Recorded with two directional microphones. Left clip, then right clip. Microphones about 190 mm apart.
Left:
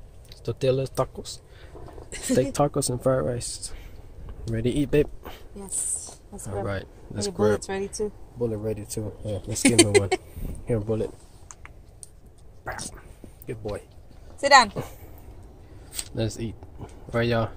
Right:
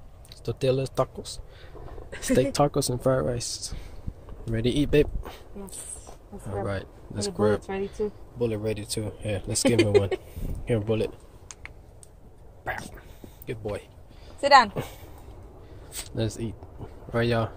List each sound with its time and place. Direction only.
0.3 s speech: centre (ahead or behind)
12.6 s speech: 5° right (ahead or behind)
14.4 s a woman's voice: 20° right (ahead or behind)
14.7 s speech: centre (ahead or behind)
15.9 s a sound: centre (ahead or behind)